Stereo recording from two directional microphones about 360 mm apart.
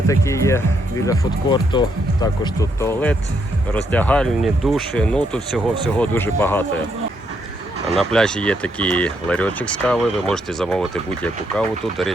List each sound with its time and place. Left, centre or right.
0.1 s speech: centre
7.9 s speech: centre